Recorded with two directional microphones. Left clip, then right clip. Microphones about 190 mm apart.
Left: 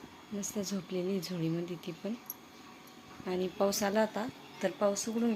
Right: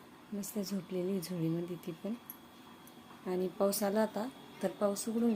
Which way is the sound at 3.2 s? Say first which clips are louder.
Left 1 dB; 5° right (ahead or behind).